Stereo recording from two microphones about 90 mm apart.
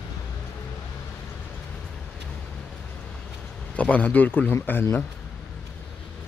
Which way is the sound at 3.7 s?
15° left (ahead or behind).